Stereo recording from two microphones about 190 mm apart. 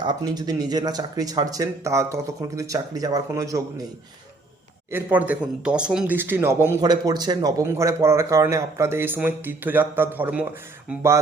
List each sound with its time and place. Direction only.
0.0 s speech: 20° right (ahead or behind)
4.9 s speech: 10° right (ahead or behind)